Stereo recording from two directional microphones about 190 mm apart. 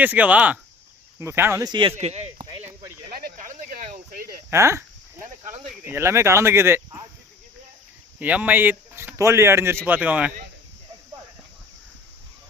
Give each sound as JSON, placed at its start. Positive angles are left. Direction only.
{"t": 0.0, "sound": "speech", "side_deg": -10}
{"t": 2.0, "sound": "speech", "side_deg": -35}
{"t": 3.1, "sound": "a sound", "side_deg": -50}
{"t": 4.5, "sound": "speech", "side_deg": -15}
{"t": 5.6, "sound": "speech", "side_deg": 0}
{"t": 5.9, "sound": "speech", "side_deg": -15}
{"t": 8.2, "sound": "speech", "side_deg": -10}